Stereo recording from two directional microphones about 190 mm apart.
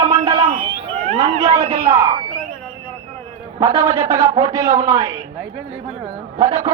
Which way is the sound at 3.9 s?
15° right (ahead or behind).